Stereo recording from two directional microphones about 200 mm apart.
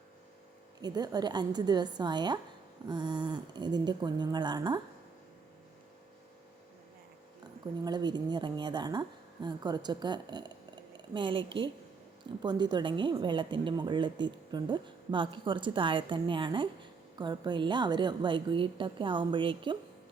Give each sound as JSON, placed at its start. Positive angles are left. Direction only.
{"t": 0.8, "sound": "a woman's voice", "side_deg": -20}
{"t": 7.9, "sound": "a woman's voice", "side_deg": -20}